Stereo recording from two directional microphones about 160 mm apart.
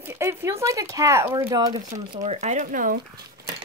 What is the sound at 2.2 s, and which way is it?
Speech, 45° right (ahead or behind).